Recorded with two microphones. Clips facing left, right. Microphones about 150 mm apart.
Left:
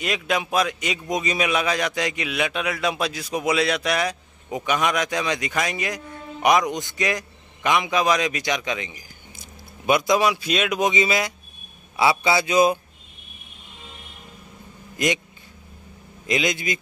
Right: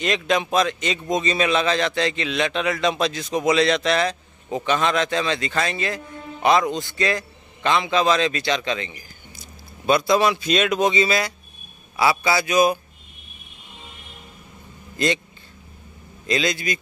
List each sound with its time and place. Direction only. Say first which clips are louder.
0.0 s a man's voice: right 3 dB; 5° left (ahead or behind); by 12.7 s 25° left (ahead or behind)
15.0 s a man's voice: right 1 dB; 15° left (ahead or behind)
16.3 s a man's voice: right 1 dB; 20° left (ahead or behind)